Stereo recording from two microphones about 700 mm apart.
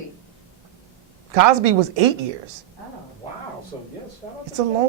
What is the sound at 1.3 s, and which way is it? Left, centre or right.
Speech, right.